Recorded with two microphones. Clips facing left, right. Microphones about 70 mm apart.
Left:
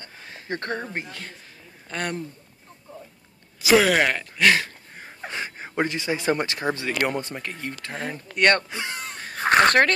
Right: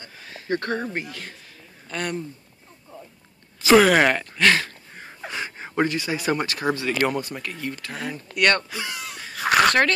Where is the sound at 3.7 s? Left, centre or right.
Centre.